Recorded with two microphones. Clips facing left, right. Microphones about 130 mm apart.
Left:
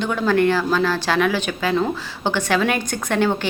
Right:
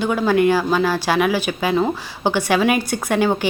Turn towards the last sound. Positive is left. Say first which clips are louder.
# right 2 dB
turn(degrees=-10)  # may be behind; listen again after turning